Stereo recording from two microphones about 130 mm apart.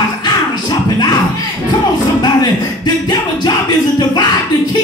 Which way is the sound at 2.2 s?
35° left (ahead or behind).